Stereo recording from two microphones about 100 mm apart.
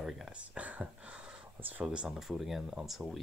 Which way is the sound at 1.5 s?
20° right (ahead or behind).